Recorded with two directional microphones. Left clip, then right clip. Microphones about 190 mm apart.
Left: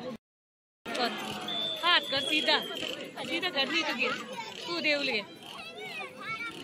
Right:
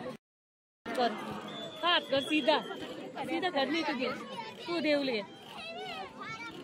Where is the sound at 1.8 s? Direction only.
55° right (ahead or behind).